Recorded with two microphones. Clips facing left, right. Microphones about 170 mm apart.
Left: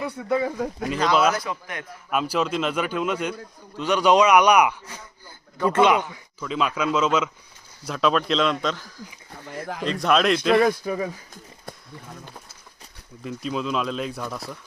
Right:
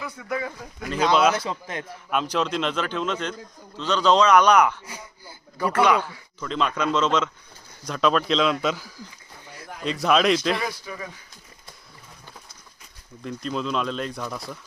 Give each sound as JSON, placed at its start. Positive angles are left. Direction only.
{"t": 0.2, "sound": "speech", "side_deg": 30}
{"t": 0.9, "sound": "speech", "side_deg": 0}
{"t": 1.4, "sound": "a man's voice", "side_deg": -25}
{"t": 2.0, "sound": "a man's voice", "side_deg": 5}
{"t": 6.4, "sound": "a man's voice", "side_deg": 5}
{"t": 10.6, "sound": "speech", "side_deg": 50}
{"t": 13.2, "sound": "speech", "side_deg": 5}